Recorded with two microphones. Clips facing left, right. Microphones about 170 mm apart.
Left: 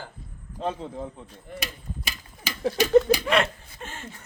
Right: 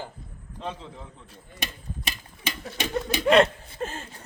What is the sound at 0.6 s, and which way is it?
Speech, 45° left (ahead or behind).